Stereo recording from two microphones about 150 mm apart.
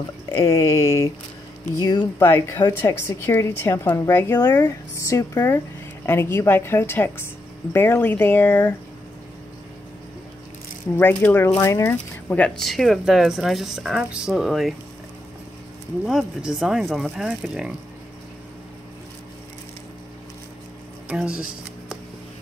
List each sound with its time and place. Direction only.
0.5 s speech: 20° left (ahead or behind)
2.1 s a woman's voice: 15° left (ahead or behind)
11.0 s a woman's voice: 15° left (ahead or behind)
16.1 s speech: 5° right (ahead or behind)
21.1 s speech: 5° right (ahead or behind)